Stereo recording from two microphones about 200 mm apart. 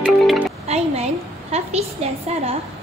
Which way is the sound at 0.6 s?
30° right (ahead or behind).